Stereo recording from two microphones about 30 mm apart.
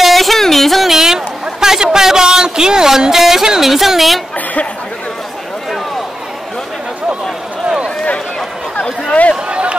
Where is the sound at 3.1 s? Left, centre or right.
Centre.